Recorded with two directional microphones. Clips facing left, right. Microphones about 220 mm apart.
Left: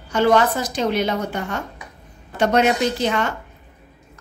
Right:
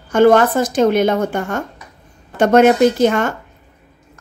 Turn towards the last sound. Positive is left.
turn(degrees=-50)  # may be behind; listen again after turning